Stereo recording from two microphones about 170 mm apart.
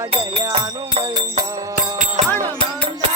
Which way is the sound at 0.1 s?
35° right (ahead or behind).